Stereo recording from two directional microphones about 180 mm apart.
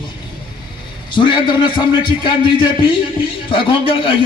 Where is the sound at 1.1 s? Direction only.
25° left (ahead or behind).